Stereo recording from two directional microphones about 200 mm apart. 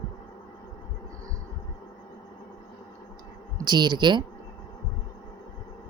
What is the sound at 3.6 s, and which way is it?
Speech, 20° right (ahead or behind).